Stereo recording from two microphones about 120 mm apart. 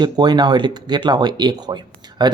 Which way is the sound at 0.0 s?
35° right (ahead or behind).